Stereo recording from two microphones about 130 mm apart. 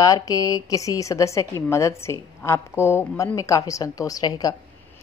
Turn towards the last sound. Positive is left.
turn(degrees=30)  # may be behind; listen again after turning